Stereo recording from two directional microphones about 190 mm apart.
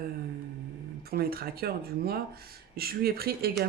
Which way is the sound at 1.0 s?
50° right (ahead or behind).